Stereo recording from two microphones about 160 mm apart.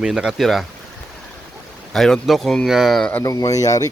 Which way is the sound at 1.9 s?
Centre (ahead or behind).